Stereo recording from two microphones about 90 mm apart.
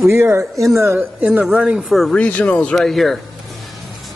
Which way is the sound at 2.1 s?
15° left (ahead or behind).